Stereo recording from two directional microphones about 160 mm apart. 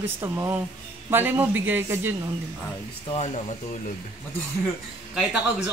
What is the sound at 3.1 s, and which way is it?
Speech, 40° left (ahead or behind).